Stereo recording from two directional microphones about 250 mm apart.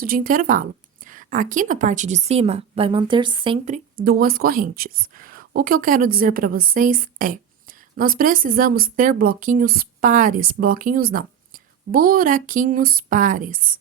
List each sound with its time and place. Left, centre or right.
0.0 s a woman's voice: right
3.9 s a woman's voice: right